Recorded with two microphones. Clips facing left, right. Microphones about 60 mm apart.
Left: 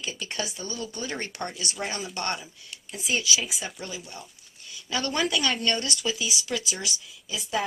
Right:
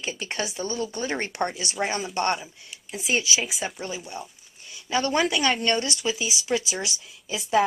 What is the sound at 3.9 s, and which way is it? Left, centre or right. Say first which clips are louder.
Speech: right 5 dB; centre.